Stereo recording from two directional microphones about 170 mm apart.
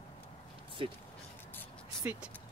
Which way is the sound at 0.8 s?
35° right (ahead or behind).